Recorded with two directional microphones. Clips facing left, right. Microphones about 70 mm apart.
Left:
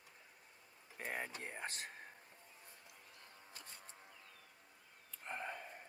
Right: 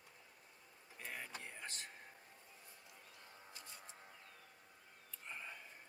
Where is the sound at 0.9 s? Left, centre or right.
Left.